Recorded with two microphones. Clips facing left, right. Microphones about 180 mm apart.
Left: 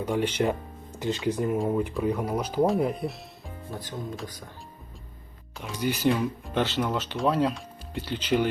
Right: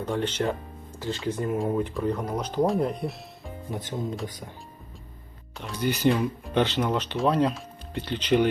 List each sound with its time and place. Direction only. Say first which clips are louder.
0.0 s speech: left 2 dB; 10° left (ahead or behind)
1.5 s speech: even; centre (ahead or behind)
3.7 s speech: right 4 dB; 20° right (ahead or behind)
5.5 s speech: right 1 dB; 5° left (ahead or behind)